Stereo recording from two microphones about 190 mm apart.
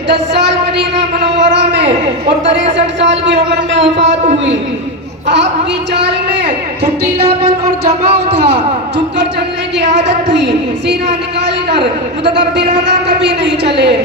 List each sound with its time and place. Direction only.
0.1 s a woman's voice: 65° right (ahead or behind)
2.7 s speech: 70° right (ahead or behind)
5.9 s a woman's voice: 65° right (ahead or behind)
9.7 s a woman's voice: 65° right (ahead or behind)
12.5 s a woman's voice: 65° right (ahead or behind)